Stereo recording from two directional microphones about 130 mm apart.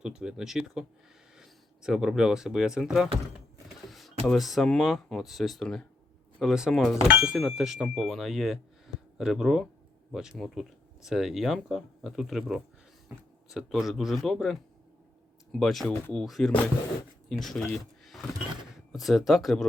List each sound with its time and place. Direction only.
0.2 s speech: 5° right (ahead or behind)
13.1 s speech: 15° right (ahead or behind)
13.5 s speech: centre (ahead or behind)